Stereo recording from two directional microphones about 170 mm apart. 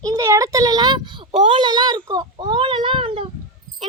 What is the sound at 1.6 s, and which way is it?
A child's voice, 25° right (ahead or behind).